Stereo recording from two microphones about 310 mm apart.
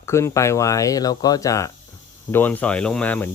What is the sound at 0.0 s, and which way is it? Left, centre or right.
Speech, centre.